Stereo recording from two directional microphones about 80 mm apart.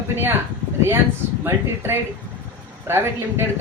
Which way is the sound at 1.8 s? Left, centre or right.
Right.